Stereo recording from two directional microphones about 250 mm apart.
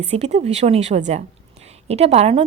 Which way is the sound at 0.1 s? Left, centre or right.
Right.